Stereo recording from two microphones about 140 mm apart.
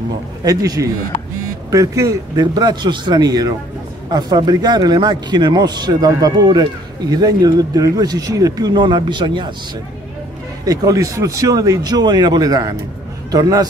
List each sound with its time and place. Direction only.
0.4 s speech: 25° right (ahead or behind)
10.6 s speech: 25° right (ahead or behind)